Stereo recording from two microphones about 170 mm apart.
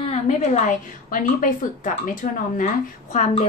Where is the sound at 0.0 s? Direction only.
40° left (ahead or behind).